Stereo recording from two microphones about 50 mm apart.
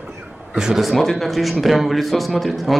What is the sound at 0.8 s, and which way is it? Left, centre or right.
A man's voice, centre.